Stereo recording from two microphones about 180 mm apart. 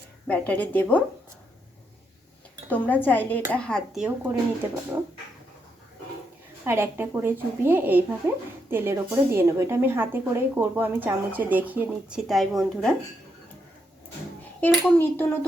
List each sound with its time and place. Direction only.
0.3 s speech: 10° left (ahead or behind)
2.6 s speech: 10° left (ahead or behind); by 4.4 s 5° right (ahead or behind)
4.9 s a woman's voice: 15° right (ahead or behind)
6.7 s a woman's voice: 10° right (ahead or behind); by 13.0 s 5° left (ahead or behind)
14.6 s speech: 10° left (ahead or behind)